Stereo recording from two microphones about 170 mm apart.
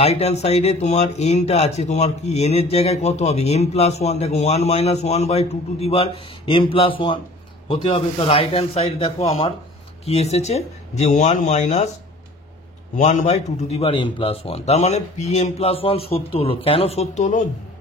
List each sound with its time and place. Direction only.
0.0 s speech: 40° left (ahead or behind)
12.9 s speech: 45° left (ahead or behind)